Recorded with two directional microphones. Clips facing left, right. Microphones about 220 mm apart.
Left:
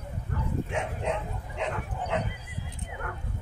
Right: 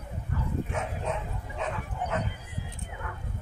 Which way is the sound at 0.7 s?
20° left (ahead or behind).